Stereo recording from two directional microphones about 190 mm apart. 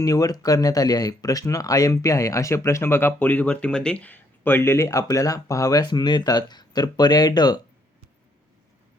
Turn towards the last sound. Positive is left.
turn(degrees=20)  # may be behind; listen again after turning